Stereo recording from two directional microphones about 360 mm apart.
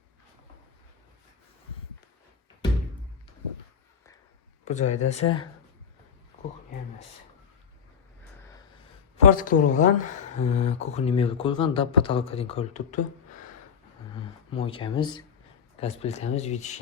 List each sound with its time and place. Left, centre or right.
4.6 s speech: centre
9.1 s speech: left
14.5 s speech: centre